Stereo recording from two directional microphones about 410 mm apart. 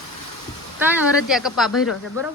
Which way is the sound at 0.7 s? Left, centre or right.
Centre.